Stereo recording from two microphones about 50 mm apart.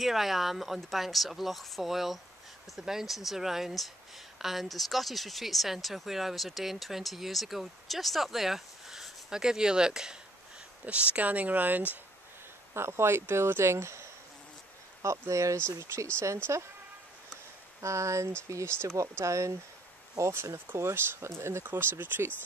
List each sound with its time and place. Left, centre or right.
0.0 s speech: centre
10.9 s speech: right
12.7 s speech: right
15.0 s speech: right
15.8 s speech: right
16.5 s speech: right
17.7 s speech: right
20.3 s speech: right
21.6 s speech: right